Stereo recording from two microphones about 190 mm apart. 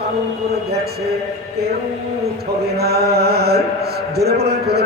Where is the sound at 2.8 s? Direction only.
55° right (ahead or behind).